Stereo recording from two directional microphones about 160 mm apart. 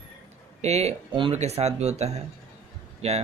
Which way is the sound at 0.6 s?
40° right (ahead or behind).